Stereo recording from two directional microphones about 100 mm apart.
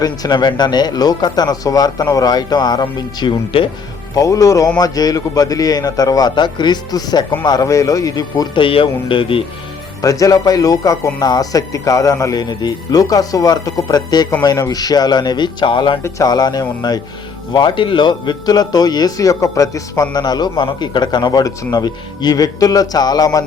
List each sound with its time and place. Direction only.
0.0 s a man's voice: 45° left (ahead or behind)
3.2 s speech: 55° left (ahead or behind)
4.1 s speech: 35° left (ahead or behind)
8.5 s speech: 60° left (ahead or behind)
10.0 s a man's voice: 35° left (ahead or behind); by 16.0 s 55° left (ahead or behind)
16.0 s a man's voice: 35° left (ahead or behind)
20.6 s a man's voice: 55° left (ahead or behind)